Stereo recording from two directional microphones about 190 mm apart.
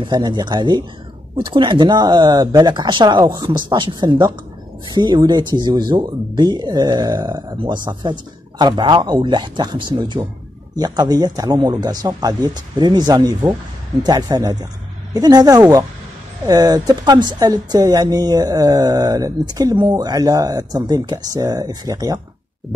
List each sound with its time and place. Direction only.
0.0 s speech: 25° right (ahead or behind)